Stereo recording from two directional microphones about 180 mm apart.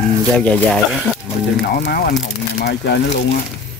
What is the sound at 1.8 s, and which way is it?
Speech, 60° left (ahead or behind).